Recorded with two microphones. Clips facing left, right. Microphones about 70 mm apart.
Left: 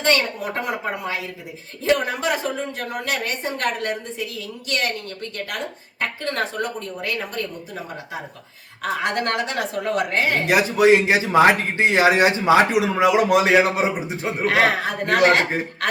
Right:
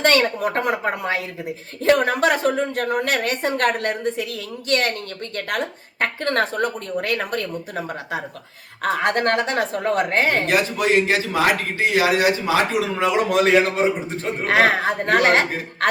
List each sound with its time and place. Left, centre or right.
0.0 s a woman's voice: right
6.0 s a woman's voice: right
8.8 s a woman's voice: right
10.4 s speech: centre
13.0 s a man's voice: centre
14.4 s a man's voice: right